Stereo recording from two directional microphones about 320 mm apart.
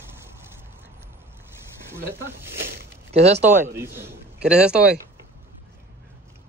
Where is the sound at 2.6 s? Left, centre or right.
Centre.